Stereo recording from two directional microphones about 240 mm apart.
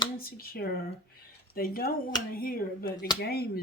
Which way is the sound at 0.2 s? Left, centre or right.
Left.